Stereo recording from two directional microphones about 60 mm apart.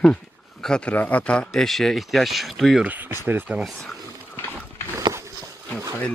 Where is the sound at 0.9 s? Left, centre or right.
Left.